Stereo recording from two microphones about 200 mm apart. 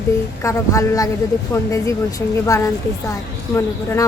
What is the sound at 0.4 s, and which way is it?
A woman's voice, 15° left (ahead or behind).